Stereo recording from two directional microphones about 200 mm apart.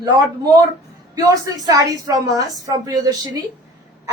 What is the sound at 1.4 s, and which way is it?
A woman's voice, 20° right (ahead or behind).